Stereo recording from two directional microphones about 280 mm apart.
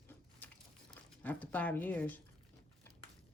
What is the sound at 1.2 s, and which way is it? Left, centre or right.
Speech, centre.